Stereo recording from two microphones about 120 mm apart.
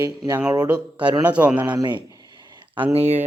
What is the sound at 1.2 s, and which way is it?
Speech, 10° right (ahead or behind).